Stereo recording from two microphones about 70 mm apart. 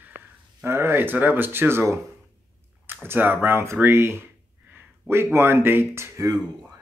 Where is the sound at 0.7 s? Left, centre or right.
Right.